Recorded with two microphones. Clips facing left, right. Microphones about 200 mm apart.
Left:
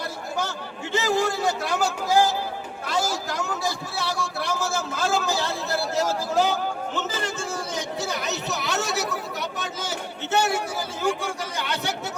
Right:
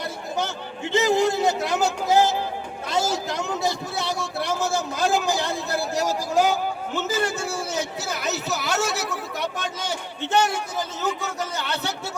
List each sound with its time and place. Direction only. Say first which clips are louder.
0.3 s a man's voice: right 2 dB; 20° right (ahead or behind); by 11.9 s 15° left (ahead or behind)